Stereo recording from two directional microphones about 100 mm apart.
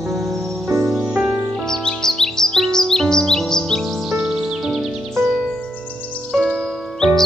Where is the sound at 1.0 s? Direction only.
20° right (ahead or behind).